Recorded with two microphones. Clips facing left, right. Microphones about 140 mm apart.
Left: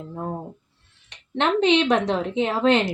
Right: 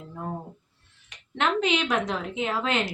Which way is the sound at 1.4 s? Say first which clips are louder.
Left 6 dB; 30° left (ahead or behind).